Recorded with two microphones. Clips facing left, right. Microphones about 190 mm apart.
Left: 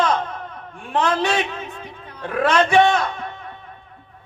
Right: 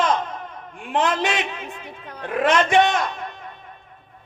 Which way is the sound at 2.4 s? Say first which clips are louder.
Left 2 dB; 20° right (ahead or behind).